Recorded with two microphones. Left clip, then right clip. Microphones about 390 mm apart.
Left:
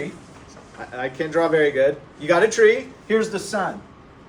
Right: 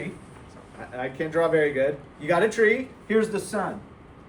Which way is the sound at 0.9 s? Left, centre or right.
Centre.